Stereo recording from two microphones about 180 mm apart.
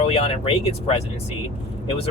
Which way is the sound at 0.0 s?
30° left (ahead or behind).